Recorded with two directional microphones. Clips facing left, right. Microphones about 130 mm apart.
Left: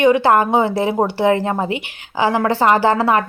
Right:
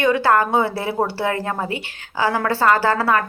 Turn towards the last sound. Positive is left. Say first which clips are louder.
# left 3 dB
turn(degrees=20)  # may be behind; listen again after turning